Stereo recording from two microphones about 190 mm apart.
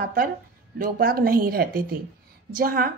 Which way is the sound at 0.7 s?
50° right (ahead or behind).